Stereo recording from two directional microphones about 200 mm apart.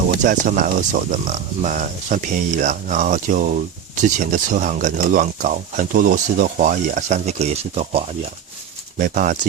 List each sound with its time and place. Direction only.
0.2 s speech: 40° right (ahead or behind)